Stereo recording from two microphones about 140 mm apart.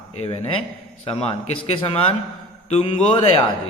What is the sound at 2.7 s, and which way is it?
Speech, 45° left (ahead or behind).